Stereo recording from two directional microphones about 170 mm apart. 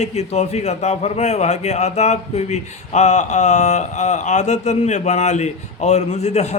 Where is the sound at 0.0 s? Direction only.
40° left (ahead or behind).